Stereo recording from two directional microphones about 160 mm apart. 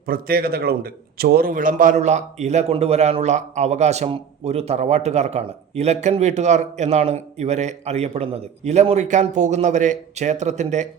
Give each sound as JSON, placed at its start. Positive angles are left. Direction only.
{"t": 0.0, "sound": "a man's voice", "side_deg": -65}